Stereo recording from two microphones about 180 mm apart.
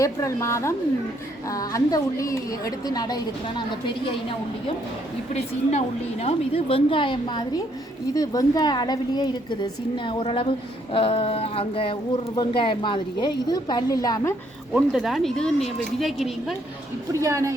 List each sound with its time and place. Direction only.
0.0 s a woman's voice: 15° left (ahead or behind)
5.3 s a woman's voice: 35° left (ahead or behind); by 14.3 s 20° left (ahead or behind)
14.7 s speech: 5° right (ahead or behind)
17.1 s a woman's voice: 20° right (ahead or behind)